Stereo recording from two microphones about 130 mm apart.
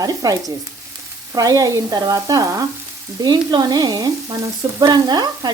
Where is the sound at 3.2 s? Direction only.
30° right (ahead or behind).